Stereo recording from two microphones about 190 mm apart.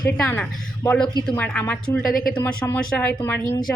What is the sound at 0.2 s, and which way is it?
Speech, 15° left (ahead or behind).